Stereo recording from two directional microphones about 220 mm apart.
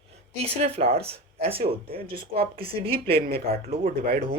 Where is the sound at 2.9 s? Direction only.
45° right (ahead or behind).